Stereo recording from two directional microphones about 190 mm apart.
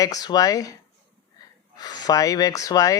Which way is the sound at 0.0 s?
20° left (ahead or behind).